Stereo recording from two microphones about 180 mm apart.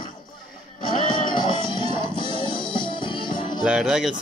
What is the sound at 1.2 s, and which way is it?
Music, 25° left (ahead or behind).